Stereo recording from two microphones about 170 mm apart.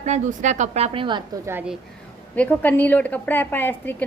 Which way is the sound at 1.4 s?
10° right (ahead or behind).